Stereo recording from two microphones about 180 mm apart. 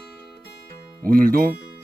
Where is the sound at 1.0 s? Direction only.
50° right (ahead or behind).